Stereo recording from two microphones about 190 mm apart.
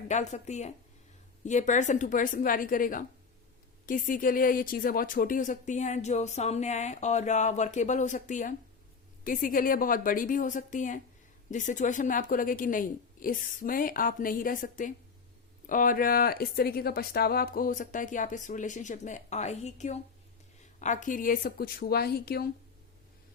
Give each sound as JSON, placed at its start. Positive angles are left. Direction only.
{"t": 0.1, "sound": "speech", "side_deg": 40}